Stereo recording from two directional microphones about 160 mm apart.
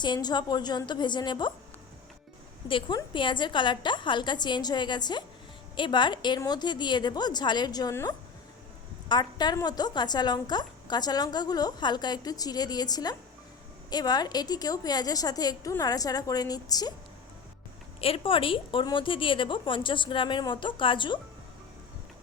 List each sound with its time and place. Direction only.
0.0 s a woman's voice: 25° left (ahead or behind)
2.6 s a woman's voice: 30° left (ahead or behind)
18.0 s a woman's voice: 35° left (ahead or behind)